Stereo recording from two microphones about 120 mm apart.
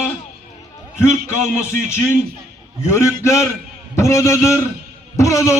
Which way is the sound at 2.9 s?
25° left (ahead or behind).